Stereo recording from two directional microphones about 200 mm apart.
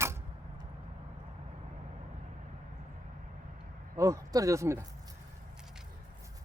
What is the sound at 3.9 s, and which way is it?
Speech, 15° right (ahead or behind).